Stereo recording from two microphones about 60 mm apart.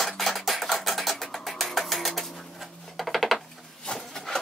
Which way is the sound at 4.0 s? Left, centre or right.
Centre.